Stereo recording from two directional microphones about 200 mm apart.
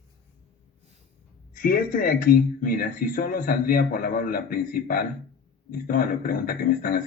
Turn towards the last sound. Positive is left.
turn(degrees=45)  # may be behind; listen again after turning